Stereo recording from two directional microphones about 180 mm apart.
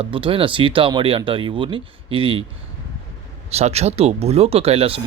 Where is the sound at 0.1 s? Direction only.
30° right (ahead or behind).